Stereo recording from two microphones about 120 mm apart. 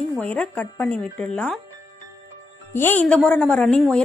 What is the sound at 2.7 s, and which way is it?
Speech, 15° left (ahead or behind).